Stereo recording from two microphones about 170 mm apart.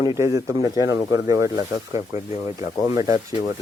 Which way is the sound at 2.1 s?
40° left (ahead or behind).